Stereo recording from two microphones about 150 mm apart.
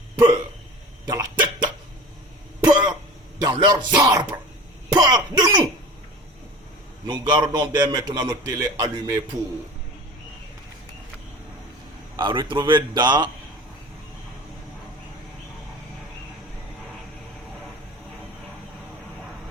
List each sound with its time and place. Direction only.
1.0 s dog: 25° right (ahead or behind)
2.6 s cough: 30° right (ahead or behind)
3.4 s a man's voice: 30° right (ahead or behind)
7.1 s a man's voice: 30° right (ahead or behind)
12.1 s a man's voice: 30° right (ahead or behind)